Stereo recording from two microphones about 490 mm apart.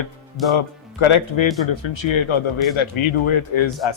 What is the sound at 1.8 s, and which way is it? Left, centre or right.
Speech, left.